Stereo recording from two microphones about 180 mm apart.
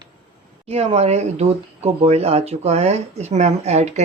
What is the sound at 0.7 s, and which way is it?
Speech, 35° right (ahead or behind).